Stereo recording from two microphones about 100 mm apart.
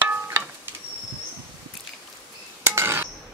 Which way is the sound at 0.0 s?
20° right (ahead or behind).